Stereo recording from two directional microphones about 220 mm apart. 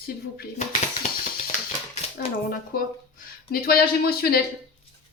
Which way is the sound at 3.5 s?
45° left (ahead or behind).